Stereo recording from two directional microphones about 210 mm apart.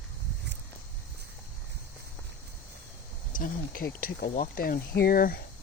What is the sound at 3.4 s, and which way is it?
Speech, 45° left (ahead or behind).